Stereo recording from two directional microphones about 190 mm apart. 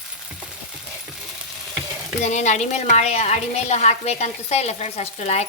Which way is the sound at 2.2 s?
40° left (ahead or behind).